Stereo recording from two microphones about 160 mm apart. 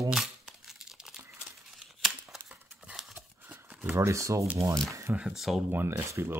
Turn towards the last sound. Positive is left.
turn(degrees=-15)  # may be behind; listen again after turning